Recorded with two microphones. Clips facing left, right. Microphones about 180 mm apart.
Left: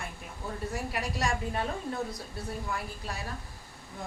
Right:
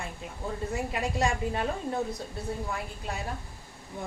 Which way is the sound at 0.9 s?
20° right (ahead or behind).